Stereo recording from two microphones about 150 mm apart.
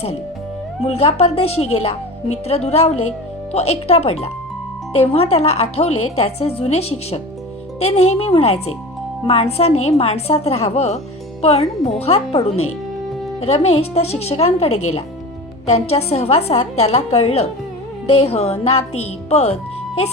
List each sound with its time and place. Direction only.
0.9 s a woman's voice: 45° left (ahead or behind)
13.4 s a woman's voice: 45° left (ahead or behind)